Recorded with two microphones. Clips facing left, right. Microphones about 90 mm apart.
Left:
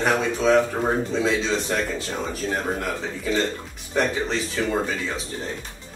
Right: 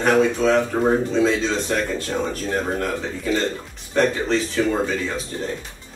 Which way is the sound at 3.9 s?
10° left (ahead or behind).